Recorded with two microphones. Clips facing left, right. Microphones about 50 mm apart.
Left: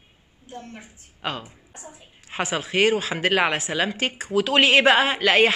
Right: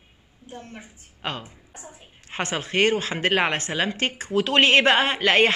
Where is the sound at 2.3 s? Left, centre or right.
Centre.